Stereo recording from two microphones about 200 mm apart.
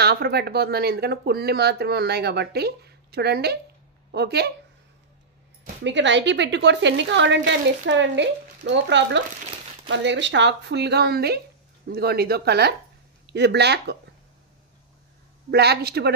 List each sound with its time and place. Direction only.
0.0 s a woman's voice: 55° right (ahead or behind)
5.9 s a woman's voice: 65° right (ahead or behind)
15.5 s a woman's voice: 55° right (ahead or behind)